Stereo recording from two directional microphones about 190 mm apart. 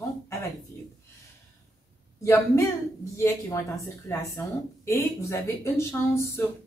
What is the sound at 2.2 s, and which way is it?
Speech, 15° left (ahead or behind).